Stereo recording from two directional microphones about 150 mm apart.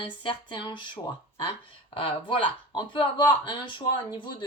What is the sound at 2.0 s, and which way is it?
Speech, 35° left (ahead or behind).